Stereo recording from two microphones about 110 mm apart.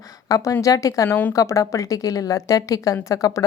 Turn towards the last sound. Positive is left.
turn(degrees=30)  # may be behind; listen again after turning